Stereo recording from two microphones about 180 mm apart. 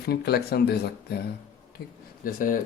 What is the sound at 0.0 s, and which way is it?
Speech, 60° left (ahead or behind).